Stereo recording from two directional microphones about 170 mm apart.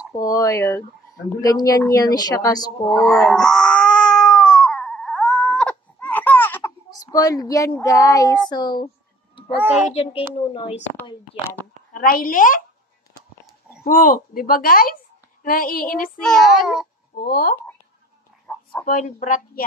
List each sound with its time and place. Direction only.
0.1 s speech: 20° left (ahead or behind)
3.1 s cat: centre (ahead or behind)
6.9 s a woman's voice: 20° left (ahead or behind)
9.6 s a child's voice: 10° right (ahead or behind)
9.9 s speech: 35° left (ahead or behind)
11.9 s speech: 55° left (ahead or behind)
13.8 s speech: 55° left (ahead or behind)
16.2 s a child's voice: centre (ahead or behind)
17.2 s speech: 65° left (ahead or behind)
18.5 s a sound: 5° left (ahead or behind)
18.9 s speech: 50° left (ahead or behind)